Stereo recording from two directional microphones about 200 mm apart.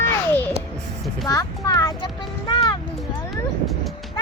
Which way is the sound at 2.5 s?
20° left (ahead or behind).